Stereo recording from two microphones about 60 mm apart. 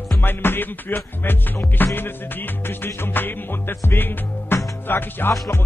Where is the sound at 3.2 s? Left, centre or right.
Left.